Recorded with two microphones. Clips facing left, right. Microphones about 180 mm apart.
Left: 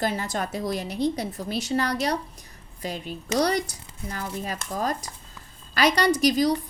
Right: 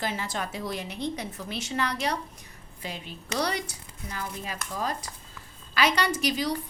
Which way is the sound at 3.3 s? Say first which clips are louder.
Left 6 dB; 40° left (ahead or behind).